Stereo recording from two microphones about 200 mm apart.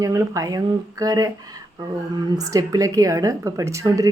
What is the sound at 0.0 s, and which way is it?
Speech, 15° right (ahead or behind).